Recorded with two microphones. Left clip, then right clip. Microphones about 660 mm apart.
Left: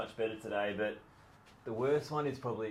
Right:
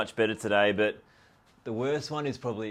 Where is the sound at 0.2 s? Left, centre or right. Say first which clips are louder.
Right 11 dB; right.